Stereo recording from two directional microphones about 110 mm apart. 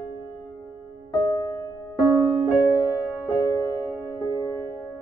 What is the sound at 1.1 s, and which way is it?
Music, 40° left (ahead or behind).